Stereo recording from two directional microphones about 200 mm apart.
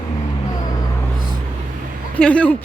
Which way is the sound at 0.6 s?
15° left (ahead or behind).